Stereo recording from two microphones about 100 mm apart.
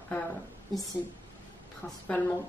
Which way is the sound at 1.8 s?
20° left (ahead or behind).